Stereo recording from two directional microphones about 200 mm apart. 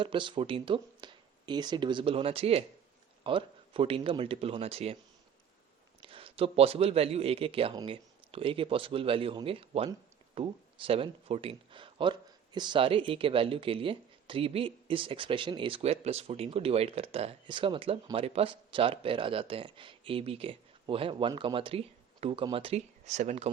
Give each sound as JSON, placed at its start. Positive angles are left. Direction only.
{"t": 0.0, "sound": "speech", "side_deg": -25}
{"t": 6.0, "sound": "speech", "side_deg": -25}